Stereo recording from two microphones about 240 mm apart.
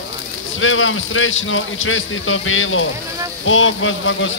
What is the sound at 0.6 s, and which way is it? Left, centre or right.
A man's voice, left.